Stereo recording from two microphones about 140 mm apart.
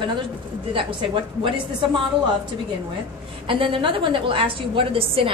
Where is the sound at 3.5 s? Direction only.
40° right (ahead or behind).